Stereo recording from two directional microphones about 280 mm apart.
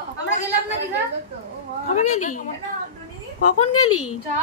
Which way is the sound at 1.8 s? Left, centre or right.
Left.